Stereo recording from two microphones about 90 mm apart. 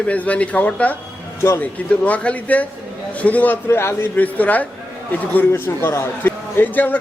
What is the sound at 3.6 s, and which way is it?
A man's voice, 25° left (ahead or behind).